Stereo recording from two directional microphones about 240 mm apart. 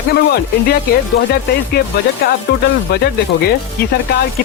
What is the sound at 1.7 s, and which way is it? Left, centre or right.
Speech, left.